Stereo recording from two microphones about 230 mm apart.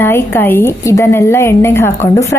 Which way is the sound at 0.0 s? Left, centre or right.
Centre.